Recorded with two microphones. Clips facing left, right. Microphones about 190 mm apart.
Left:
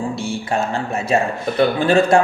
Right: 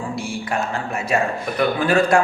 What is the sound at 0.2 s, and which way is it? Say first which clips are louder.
Speech: left 3 dB; 25° left (ahead or behind).